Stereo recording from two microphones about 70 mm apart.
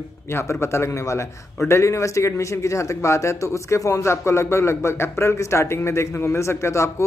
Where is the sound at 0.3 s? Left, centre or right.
Left.